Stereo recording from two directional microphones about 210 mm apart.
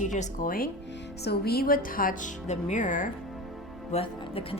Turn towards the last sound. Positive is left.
turn(degrees=25)  # may be behind; listen again after turning